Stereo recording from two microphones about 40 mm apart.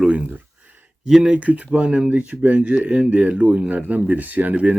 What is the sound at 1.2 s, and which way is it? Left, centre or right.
Speech, right.